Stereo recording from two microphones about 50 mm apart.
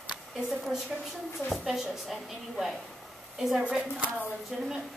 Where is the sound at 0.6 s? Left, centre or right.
Centre.